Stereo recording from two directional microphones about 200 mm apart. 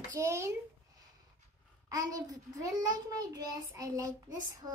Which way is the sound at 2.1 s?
15° right (ahead or behind).